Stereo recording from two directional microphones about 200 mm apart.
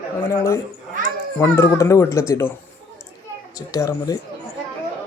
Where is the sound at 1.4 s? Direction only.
15° left (ahead or behind).